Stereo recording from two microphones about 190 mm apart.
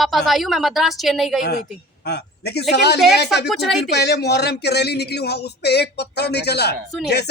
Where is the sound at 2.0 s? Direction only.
60° left (ahead or behind).